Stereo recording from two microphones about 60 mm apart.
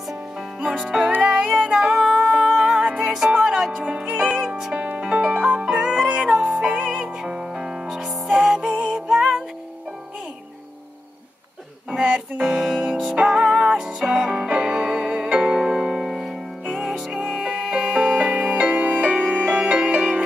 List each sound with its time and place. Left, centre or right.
0.1 s music: centre
3.8 s music: centre
4.5 s music: centre
4.7 s music: right
8.7 s music: centre
11.9 s music: centre
13.1 s music: centre